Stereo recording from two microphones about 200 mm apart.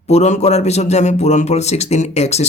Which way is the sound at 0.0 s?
35° left (ahead or behind).